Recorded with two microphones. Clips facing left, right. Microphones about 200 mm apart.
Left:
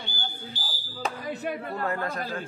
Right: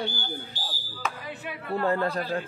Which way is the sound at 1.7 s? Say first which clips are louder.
Right 10 dB; 30° right (ahead or behind).